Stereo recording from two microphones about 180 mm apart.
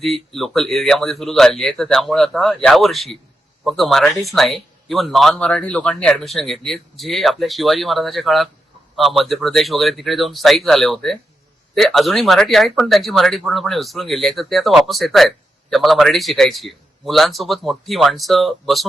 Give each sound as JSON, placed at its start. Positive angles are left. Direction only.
{"t": 0.0, "sound": "speech", "side_deg": 0}